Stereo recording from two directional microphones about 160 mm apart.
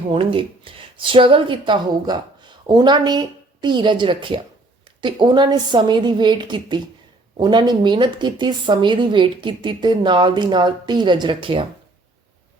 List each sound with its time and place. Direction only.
0.1 s a woman's voice: 35° right (ahead or behind)